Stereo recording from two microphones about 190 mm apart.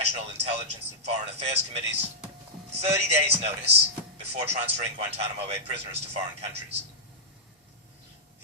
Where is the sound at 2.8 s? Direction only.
35° right (ahead or behind).